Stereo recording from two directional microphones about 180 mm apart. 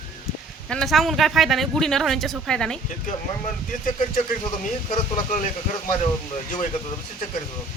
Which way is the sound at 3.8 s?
45° left (ahead or behind).